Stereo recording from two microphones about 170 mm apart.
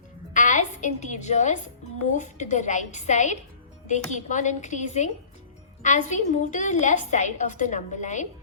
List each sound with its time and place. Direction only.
0.3 s a woman's voice: 45° left (ahead or behind)